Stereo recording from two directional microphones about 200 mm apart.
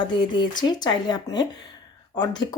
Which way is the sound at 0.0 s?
20° left (ahead or behind).